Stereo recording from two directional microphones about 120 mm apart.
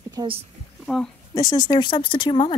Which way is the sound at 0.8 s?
5° left (ahead or behind).